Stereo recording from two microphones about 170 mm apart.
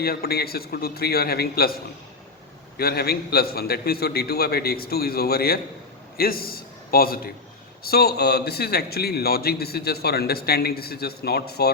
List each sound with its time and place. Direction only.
0.0 s a man's voice: 65° left (ahead or behind)
2.7 s a man's voice: 65° left (ahead or behind)